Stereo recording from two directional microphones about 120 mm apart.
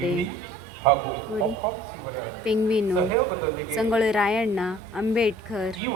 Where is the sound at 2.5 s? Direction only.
5° right (ahead or behind).